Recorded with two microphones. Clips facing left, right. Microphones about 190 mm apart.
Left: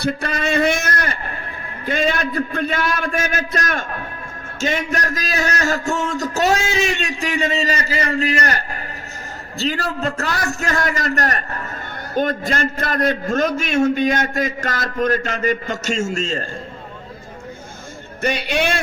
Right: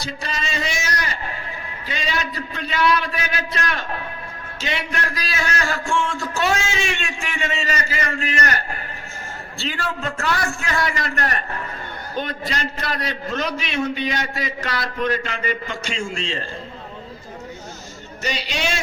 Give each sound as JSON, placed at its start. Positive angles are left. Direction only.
{"t": 0.0, "sound": "a man's voice", "side_deg": 55}
{"t": 18.2, "sound": "speech", "side_deg": 55}